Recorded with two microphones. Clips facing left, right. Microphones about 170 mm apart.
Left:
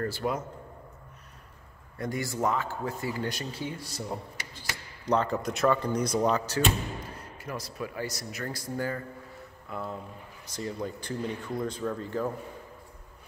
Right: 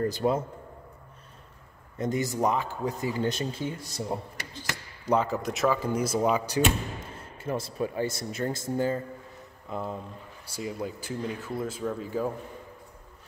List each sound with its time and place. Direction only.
0.0 s speech: 20° right (ahead or behind)
2.0 s speech: 20° right (ahead or behind)
5.0 s speech: 5° right (ahead or behind)
7.0 s speech: 25° right (ahead or behind)
10.4 s speech: 10° right (ahead or behind)